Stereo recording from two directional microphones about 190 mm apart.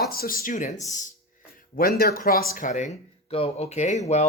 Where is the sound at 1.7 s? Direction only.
55° left (ahead or behind).